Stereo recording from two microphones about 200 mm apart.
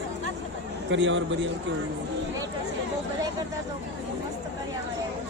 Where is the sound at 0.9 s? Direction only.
70° right (ahead or behind).